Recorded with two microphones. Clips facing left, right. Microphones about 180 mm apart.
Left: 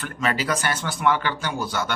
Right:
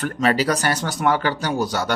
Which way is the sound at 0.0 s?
40° right (ahead or behind).